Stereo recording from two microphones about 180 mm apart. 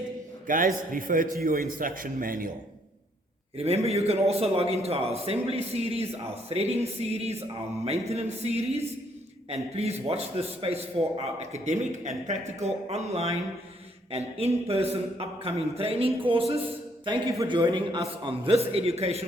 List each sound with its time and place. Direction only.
0.4 s a man's voice: 50° right (ahead or behind)
3.6 s speech: 35° right (ahead or behind)